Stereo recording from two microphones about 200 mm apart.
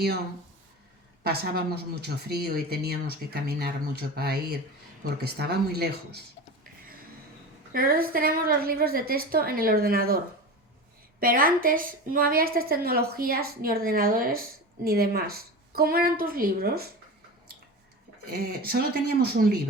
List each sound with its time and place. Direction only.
1.2 s a woman's voice: 50° right (ahead or behind)
7.7 s a woman's voice: 45° right (ahead or behind)
11.2 s a woman's voice: 45° right (ahead or behind)
18.3 s a woman's voice: 50° right (ahead or behind)